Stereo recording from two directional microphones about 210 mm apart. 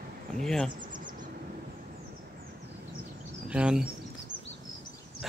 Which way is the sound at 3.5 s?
5° right (ahead or behind).